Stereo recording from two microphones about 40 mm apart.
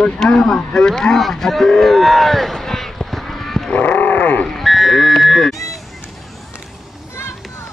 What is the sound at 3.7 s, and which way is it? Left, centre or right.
Wild animals, left.